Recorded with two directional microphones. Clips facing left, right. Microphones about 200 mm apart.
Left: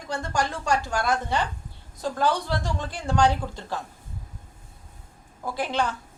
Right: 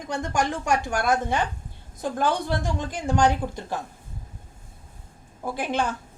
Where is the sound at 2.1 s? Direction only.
15° right (ahead or behind).